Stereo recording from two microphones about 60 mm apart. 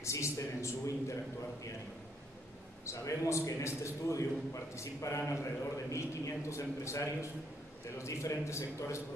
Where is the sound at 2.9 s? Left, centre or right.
Left.